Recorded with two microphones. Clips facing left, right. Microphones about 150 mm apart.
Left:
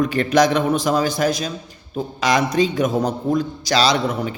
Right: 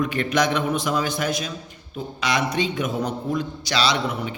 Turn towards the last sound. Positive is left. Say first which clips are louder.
# left 4 dB
turn(degrees=40)  # may be behind; listen again after turning